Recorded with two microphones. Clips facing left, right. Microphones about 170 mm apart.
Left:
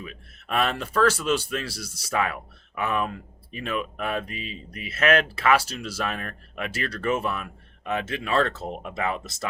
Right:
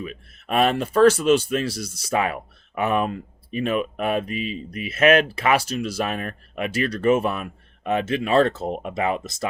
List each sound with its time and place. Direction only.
0.0 s speech: 20° right (ahead or behind)